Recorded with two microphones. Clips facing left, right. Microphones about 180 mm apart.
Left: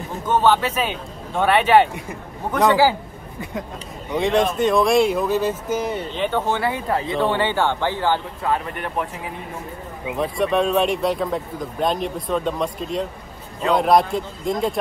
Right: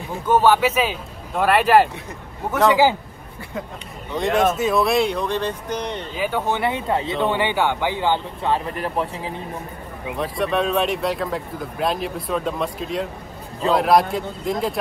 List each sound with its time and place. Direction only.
0.3 s speech: 10° right (ahead or behind)
2.7 s speech: 20° right (ahead or behind)
4.2 s speech: centre (ahead or behind)
6.1 s speech: 10° right (ahead or behind); by 7.2 s 25° right (ahead or behind)
7.2 s speech: 15° right (ahead or behind); by 9.4 s 30° right (ahead or behind)
10.1 s speech: centre (ahead or behind)